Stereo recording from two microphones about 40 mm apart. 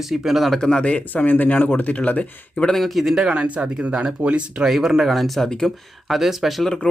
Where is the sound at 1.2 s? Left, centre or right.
Left.